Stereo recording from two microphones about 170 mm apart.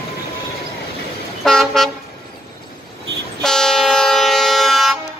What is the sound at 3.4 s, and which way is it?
Train, 5° left (ahead or behind).